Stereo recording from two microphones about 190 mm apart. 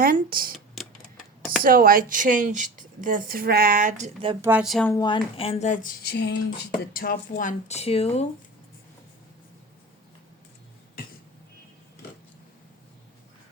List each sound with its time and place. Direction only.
0.0 s a woman's voice: 50° right (ahead or behind)
1.6 s a woman's voice: 50° right (ahead or behind); by 4.4 s 35° right (ahead or behind)
4.4 s speech: 15° right (ahead or behind)
4.6 s speech: centre (ahead or behind)
4.9 s speech: 20° left (ahead or behind); by 5.9 s 40° left (ahead or behind)
6.0 s speech: 60° left (ahead or behind)
6.9 s speech: 50° left (ahead or behind); by 8.3 s 35° left (ahead or behind)